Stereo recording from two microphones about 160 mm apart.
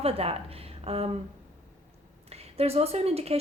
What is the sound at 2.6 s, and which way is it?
Speech, 40° right (ahead or behind).